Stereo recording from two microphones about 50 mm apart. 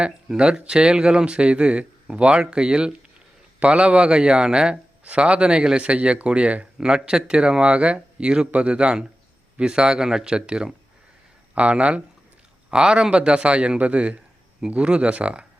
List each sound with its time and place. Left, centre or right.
0.0 s speech: centre